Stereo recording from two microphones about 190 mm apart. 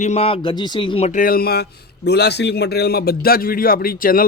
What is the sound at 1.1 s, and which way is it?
A man's voice, 45° left (ahead or behind).